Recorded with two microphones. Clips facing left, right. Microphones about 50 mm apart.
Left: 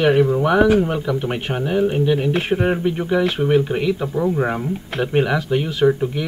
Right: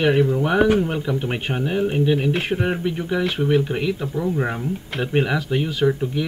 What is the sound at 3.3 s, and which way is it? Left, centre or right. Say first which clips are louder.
Speech: even; left.